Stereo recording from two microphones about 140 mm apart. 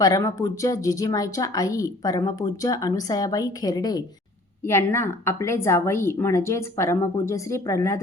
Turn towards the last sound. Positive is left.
turn(degrees=20)  # may be behind; listen again after turning